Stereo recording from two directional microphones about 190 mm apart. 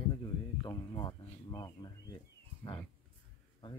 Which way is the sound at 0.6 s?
25° left (ahead or behind).